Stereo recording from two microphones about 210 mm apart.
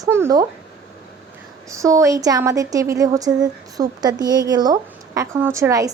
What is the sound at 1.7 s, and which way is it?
A woman's voice, 15° right (ahead or behind).